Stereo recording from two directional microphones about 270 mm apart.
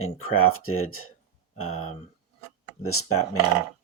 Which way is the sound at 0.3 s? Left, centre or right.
Left.